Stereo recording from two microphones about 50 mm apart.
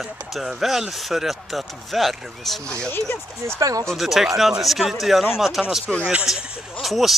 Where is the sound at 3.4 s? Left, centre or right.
Right.